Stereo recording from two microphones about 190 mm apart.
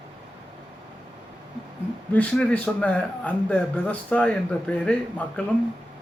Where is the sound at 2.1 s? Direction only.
5° left (ahead or behind).